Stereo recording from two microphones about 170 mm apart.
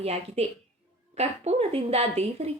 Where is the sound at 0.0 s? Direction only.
40° right (ahead or behind).